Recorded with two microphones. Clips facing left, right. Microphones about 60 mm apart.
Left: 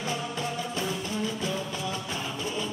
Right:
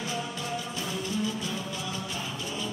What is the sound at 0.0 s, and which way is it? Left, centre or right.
Music, left.